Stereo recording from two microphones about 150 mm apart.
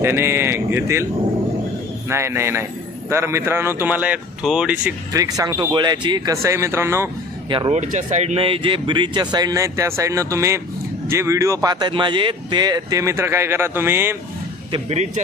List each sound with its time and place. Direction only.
0.0 s speech: 15° right (ahead or behind)
2.0 s speech: 15° right (ahead or behind)
5.1 s speech: 25° right (ahead or behind)
7.7 s speech: 50° right (ahead or behind); by 14.2 s 15° right (ahead or behind)
14.7 s speech: 45° right (ahead or behind)